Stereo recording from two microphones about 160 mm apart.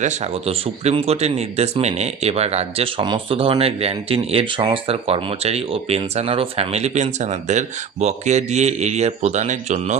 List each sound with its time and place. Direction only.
0.0 s speech: 45° right (ahead or behind)